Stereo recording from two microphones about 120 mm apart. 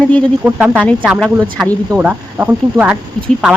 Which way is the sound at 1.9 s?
10° right (ahead or behind).